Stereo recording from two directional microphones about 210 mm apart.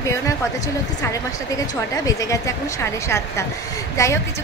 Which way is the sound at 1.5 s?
15° left (ahead or behind).